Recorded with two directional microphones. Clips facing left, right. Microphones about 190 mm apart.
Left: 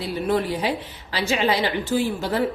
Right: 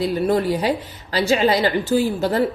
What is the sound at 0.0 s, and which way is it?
A woman's voice, 40° right (ahead or behind).